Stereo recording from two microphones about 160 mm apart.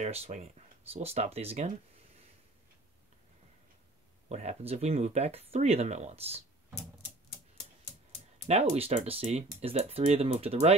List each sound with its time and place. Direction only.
0.0 s speech: 40° right (ahead or behind)
4.3 s speech: 45° right (ahead or behind)
8.5 s speech: 40° right (ahead or behind)